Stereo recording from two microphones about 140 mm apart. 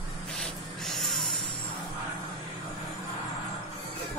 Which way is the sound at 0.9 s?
Centre (ahead or behind).